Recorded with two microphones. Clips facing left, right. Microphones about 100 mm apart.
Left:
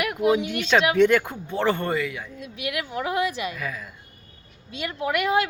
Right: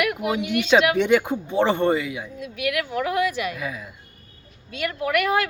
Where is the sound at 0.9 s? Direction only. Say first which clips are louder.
Left 1 dB; 15° right (ahead or behind).